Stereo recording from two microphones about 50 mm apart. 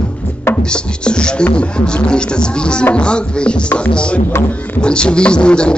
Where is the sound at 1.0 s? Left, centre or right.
Centre.